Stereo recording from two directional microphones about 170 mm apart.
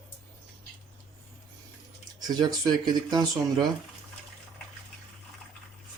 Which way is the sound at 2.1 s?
25° right (ahead or behind).